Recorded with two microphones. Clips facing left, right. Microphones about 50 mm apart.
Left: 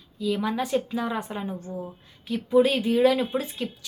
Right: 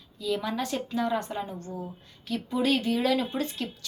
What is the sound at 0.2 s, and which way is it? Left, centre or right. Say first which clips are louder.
A woman's voice: left 3 dB; centre.